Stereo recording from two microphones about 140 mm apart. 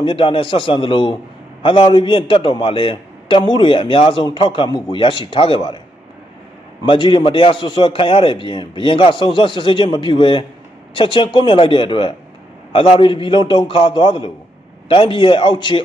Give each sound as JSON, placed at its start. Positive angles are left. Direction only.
{"t": 0.0, "sound": "a man's voice", "side_deg": 40}
{"t": 6.9, "sound": "a man's voice", "side_deg": 35}